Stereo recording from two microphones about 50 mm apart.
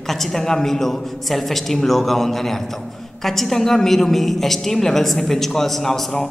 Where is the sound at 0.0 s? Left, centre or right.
Centre.